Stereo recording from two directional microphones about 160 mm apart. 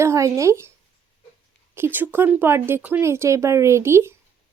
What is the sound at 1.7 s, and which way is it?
Speech, 15° right (ahead or behind).